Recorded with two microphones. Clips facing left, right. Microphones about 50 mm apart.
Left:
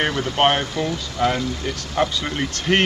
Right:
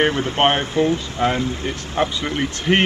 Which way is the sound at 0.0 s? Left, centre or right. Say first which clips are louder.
Right 2 dB; right.